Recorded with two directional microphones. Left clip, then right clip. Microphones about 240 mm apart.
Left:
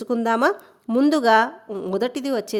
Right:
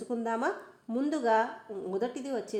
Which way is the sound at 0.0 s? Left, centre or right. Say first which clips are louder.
Left 12 dB; left.